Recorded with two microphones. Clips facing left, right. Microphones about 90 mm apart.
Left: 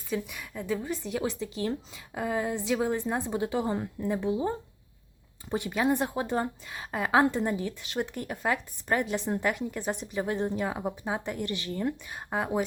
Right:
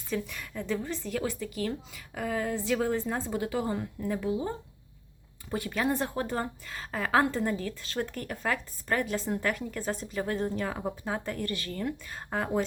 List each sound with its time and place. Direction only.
0.1 s a woman's voice: 10° left (ahead or behind)